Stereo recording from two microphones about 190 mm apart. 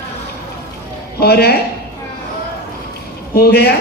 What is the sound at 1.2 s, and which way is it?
Speech, 55° left (ahead or behind).